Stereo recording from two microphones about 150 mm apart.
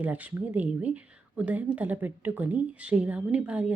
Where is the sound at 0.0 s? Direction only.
10° right (ahead or behind).